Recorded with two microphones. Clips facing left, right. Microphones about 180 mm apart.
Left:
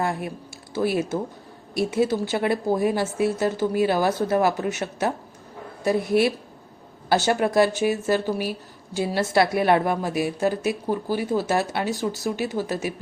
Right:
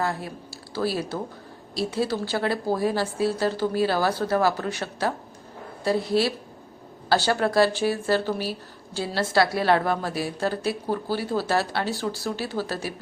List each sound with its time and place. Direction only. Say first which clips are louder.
0.0 s speech: left 2 dB; 20° left (ahead or behind)
7.1 s a woman's voice: left 1 dB; 20° left (ahead or behind)